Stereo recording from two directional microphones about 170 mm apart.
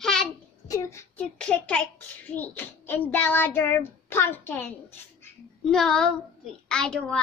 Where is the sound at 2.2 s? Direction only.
10° left (ahead or behind).